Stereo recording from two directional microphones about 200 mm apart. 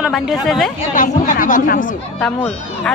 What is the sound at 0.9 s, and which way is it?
Speech, 40° left (ahead or behind).